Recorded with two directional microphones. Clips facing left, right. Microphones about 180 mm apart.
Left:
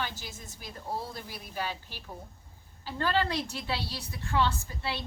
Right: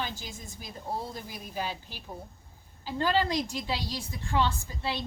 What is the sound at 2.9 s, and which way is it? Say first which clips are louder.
A woman's voice: right 2 dB; 15° right (ahead or behind).